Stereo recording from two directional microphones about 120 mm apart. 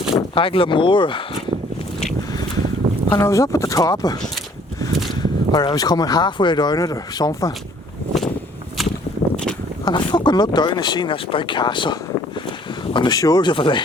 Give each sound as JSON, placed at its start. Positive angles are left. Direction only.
{"t": 0.1, "sound": "speech", "side_deg": 45}
{"t": 3.1, "sound": "speech", "side_deg": 25}
{"t": 5.5, "sound": "speech", "side_deg": 35}
{"t": 9.3, "sound": "a sound", "side_deg": 5}
{"t": 9.8, "sound": "speech", "side_deg": 40}